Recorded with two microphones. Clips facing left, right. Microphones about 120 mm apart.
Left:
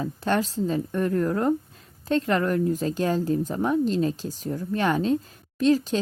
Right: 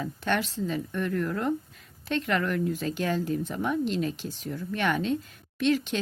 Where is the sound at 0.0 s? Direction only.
35° left (ahead or behind).